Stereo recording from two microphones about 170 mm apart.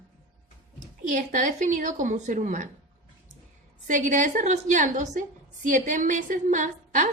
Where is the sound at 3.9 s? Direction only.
50° right (ahead or behind).